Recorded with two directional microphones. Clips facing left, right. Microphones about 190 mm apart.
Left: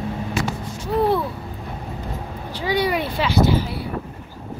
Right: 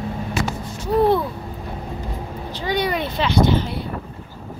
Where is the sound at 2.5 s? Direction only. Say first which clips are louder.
Left 1 dB; 10° left (ahead or behind).